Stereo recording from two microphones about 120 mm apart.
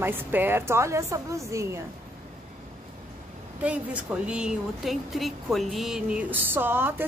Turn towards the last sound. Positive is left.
turn(degrees=-20)  # may be behind; listen again after turning